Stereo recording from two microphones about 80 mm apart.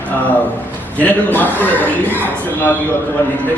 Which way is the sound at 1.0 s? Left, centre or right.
Left.